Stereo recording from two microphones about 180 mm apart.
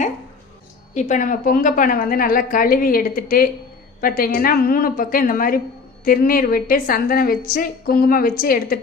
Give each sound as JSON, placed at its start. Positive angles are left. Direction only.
{"t": 0.9, "sound": "a woman's voice", "side_deg": 45}